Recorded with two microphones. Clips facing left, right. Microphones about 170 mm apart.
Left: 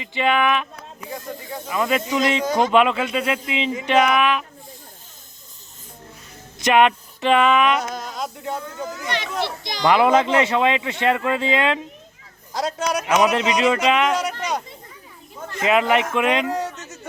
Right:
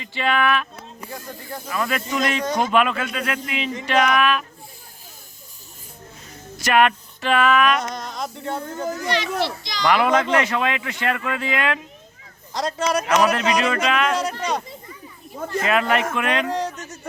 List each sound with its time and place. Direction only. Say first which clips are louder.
0.0 s speech: left 2 dB; 15° left (ahead or behind)
0.8 s speech: left 2 dB; 5° right (ahead or behind)
1.7 s speech: left 3 dB; 20° left (ahead or behind)
6.6 s speech: left 2 dB; 20° left (ahead or behind)
7.8 s speech: left 1 dB; 5° left (ahead or behind)
9.1 s a child's voice: left 1 dB; 55° left (ahead or behind)
9.8 s speech: left 2 dB; 20° left (ahead or behind)
12.5 s speech: right 1 dB; centre (ahead or behind)
13.2 s speech: left 2 dB; 20° left (ahead or behind)
14.2 s speech: right 1 dB; centre (ahead or behind)
15.6 s speech: left 3 dB; 20° left (ahead or behind)
16.5 s speech: even; 5° left (ahead or behind)